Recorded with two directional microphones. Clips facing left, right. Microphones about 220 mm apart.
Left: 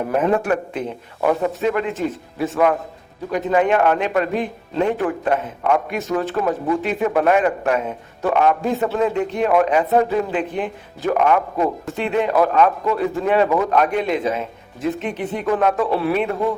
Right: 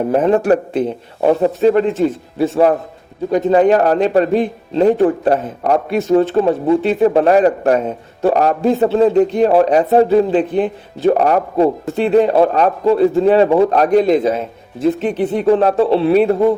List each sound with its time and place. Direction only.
0.1 s speech: 35° right (ahead or behind)